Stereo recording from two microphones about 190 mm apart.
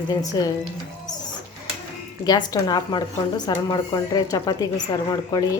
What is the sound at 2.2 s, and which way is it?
Speech, 20° left (ahead or behind).